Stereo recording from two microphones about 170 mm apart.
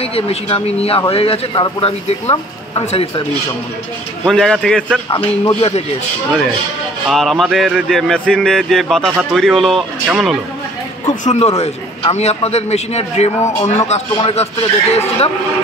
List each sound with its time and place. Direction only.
0.0 s a man's voice: 35° left (ahead or behind)
4.3 s speech: 5° left (ahead or behind)
5.1 s a man's voice: 30° left (ahead or behind)
7.1 s speech: centre (ahead or behind)
10.0 s speech: 10° right (ahead or behind)
11.3 s a man's voice: 40° left (ahead or behind)